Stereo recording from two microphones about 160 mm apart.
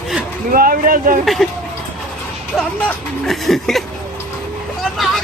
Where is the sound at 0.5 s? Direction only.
65° right (ahead or behind).